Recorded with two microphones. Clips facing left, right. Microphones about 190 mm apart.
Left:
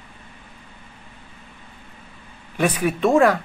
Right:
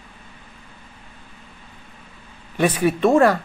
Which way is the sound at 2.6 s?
Centre (ahead or behind).